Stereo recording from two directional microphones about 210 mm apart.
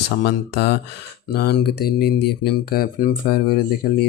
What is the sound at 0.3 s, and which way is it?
Speech, 55° left (ahead or behind).